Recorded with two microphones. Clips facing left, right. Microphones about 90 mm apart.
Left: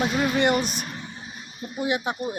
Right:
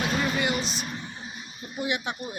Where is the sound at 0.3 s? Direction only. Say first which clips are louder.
Left 6 dB; 55° left (ahead or behind).